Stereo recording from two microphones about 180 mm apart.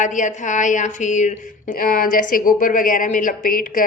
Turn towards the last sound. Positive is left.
turn(degrees=50)  # may be behind; listen again after turning